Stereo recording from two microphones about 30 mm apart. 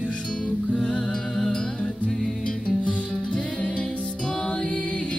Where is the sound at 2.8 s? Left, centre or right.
Left.